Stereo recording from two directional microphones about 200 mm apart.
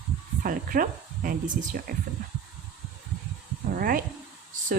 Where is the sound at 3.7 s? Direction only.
45° right (ahead or behind).